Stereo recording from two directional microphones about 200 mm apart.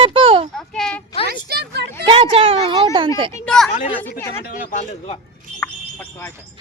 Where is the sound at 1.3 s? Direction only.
55° right (ahead or behind).